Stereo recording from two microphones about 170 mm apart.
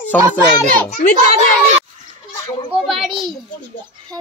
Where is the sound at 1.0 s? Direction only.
50° left (ahead or behind).